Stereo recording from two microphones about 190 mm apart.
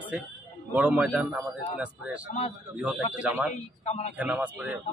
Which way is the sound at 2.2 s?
35° left (ahead or behind).